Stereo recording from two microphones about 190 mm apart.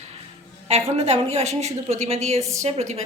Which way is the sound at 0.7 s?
35° right (ahead or behind).